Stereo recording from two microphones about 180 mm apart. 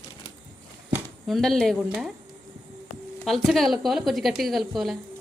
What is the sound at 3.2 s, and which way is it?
A woman's voice, centre (ahead or behind).